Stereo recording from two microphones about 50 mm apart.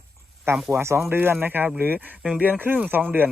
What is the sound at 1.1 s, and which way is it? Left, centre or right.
Speech, right.